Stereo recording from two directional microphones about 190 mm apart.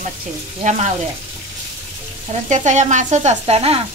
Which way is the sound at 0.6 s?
35° right (ahead or behind).